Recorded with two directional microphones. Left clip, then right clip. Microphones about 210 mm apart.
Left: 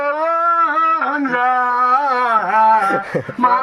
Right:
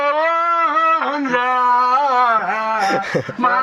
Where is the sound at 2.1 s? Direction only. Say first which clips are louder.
Left 1 dB; 55° left (ahead or behind).